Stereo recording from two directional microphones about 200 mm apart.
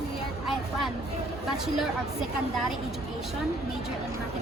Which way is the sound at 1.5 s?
Centre (ahead or behind).